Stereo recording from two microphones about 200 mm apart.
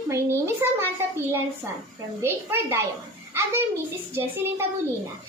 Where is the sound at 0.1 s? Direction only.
10° right (ahead or behind).